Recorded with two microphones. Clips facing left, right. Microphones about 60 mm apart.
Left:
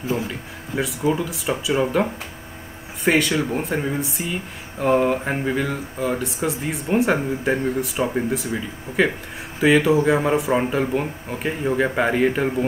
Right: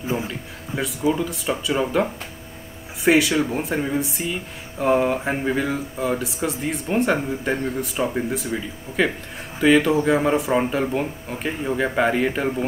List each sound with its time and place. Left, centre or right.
0.7 s speech: centre